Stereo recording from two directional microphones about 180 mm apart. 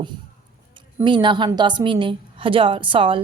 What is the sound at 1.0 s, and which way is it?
A woman's voice, 25° right (ahead or behind).